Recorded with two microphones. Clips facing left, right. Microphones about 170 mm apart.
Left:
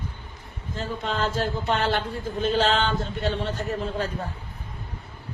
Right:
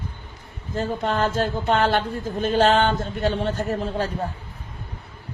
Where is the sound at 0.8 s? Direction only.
50° right (ahead or behind).